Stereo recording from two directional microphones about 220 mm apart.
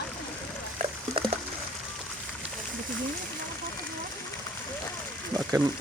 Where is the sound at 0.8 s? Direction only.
25° right (ahead or behind).